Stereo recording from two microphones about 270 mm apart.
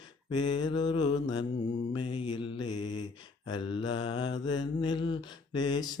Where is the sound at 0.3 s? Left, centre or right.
Centre.